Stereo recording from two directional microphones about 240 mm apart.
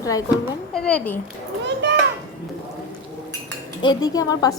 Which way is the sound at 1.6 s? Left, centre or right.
Right.